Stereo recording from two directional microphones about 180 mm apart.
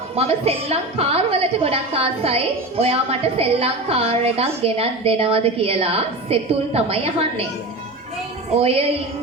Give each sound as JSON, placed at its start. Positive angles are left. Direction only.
{"t": 0.2, "sound": "a woman's voice", "side_deg": -35}
{"t": 8.5, "sound": "a woman's voice", "side_deg": -35}